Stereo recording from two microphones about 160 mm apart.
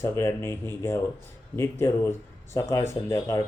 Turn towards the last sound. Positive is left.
turn(degrees=20)  # may be behind; listen again after turning